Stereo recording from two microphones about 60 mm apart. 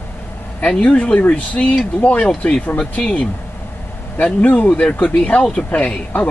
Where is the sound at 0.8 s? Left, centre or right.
Left.